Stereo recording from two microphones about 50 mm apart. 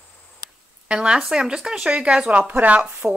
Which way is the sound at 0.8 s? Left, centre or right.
Centre.